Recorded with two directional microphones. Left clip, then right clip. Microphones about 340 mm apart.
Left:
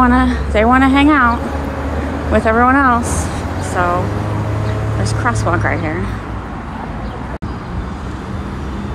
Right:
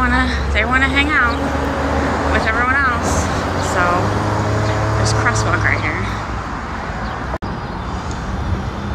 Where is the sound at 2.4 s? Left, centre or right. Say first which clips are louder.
Left 6 dB; centre.